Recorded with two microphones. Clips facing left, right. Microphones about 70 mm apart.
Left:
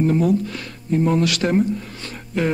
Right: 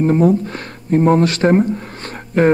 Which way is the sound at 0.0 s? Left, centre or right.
Right.